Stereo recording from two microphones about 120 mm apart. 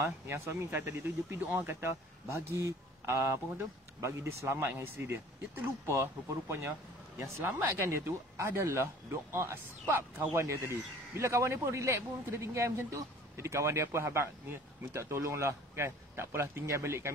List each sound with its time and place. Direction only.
0.0 s a man's voice: 20° right (ahead or behind)
7.2 s a man's voice: 20° right (ahead or behind)